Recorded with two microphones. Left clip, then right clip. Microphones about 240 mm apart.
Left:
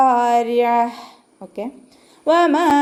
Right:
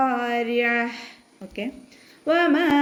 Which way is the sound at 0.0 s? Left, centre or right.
Centre.